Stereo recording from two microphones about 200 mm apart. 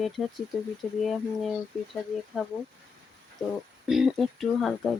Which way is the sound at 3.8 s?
Centre (ahead or behind).